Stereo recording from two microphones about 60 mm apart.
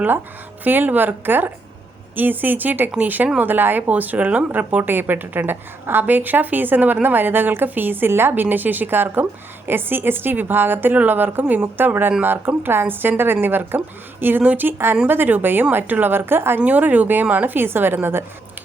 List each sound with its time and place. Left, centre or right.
0.6 s speech: right
16.6 s speech: right